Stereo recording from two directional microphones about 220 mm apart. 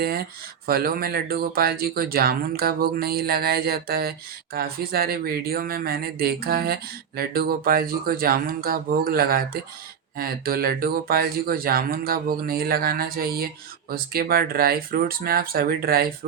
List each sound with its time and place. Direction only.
0.0 s speech: 45° right (ahead or behind)